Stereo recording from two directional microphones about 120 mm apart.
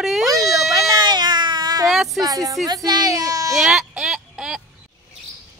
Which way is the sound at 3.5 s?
5° right (ahead or behind).